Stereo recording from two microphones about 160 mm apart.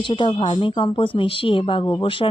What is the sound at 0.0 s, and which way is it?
Speech, 30° left (ahead or behind).